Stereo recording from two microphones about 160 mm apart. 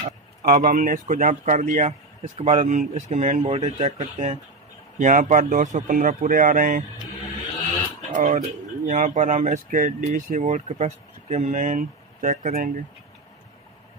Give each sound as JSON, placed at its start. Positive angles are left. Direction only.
{"t": 0.4, "sound": "speech", "side_deg": -60}
{"t": 8.1, "sound": "speech", "side_deg": -55}